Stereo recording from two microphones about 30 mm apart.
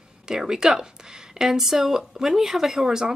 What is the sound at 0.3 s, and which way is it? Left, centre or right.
A woman's voice, right.